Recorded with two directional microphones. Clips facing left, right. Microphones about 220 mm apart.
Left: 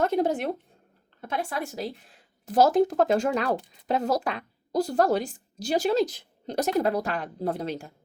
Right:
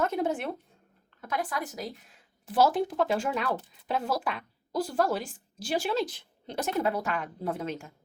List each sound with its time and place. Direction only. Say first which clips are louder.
0.0 s a woman's voice: left 4 dB; 35° left (ahead or behind)